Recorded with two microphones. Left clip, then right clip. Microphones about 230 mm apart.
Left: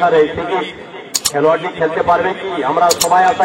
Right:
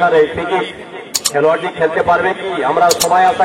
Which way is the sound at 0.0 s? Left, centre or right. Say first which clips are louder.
Even; right.